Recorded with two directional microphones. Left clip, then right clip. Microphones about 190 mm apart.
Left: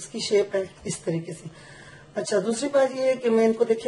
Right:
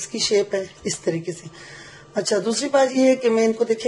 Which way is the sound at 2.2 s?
35° right (ahead or behind).